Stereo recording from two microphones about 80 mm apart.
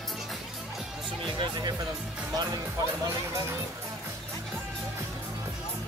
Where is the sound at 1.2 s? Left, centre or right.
Right.